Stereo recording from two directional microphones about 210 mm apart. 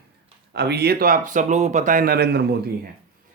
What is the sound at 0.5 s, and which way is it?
Speech, 50° right (ahead or behind).